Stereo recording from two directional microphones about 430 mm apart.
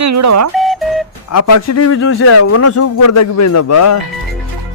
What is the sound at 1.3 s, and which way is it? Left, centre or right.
A man's voice, left.